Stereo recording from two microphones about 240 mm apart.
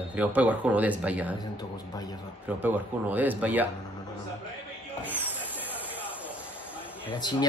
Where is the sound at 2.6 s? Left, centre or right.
Centre.